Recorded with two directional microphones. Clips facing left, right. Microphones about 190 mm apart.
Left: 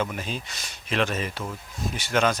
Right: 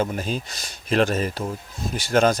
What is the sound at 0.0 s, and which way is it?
Speech, 40° right (ahead or behind).